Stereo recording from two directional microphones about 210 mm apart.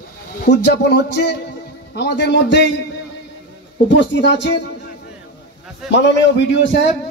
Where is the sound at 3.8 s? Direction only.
60° left (ahead or behind).